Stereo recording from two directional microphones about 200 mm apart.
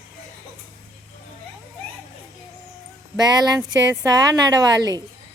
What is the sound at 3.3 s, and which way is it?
A woman's voice, 20° right (ahead or behind).